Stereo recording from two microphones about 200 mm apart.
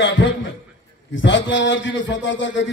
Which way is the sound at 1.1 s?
65° left (ahead or behind).